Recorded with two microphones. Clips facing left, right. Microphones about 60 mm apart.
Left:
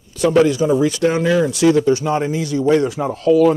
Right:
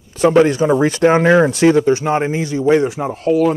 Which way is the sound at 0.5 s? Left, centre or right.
Right.